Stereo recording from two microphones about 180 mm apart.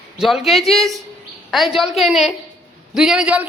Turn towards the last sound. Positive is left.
turn(degrees=-10)  # may be behind; listen again after turning